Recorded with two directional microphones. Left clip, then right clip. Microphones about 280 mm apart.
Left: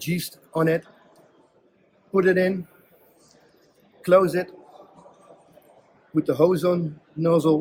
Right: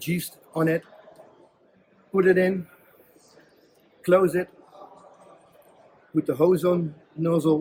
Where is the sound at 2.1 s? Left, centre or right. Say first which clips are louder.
Even; centre.